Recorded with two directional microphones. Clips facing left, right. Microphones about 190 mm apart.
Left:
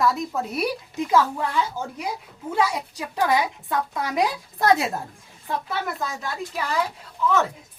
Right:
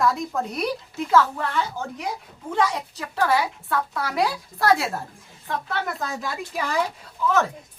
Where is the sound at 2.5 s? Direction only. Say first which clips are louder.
Even; 10° left (ahead or behind).